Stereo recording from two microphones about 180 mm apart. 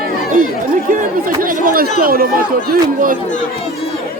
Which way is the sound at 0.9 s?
50° right (ahead or behind).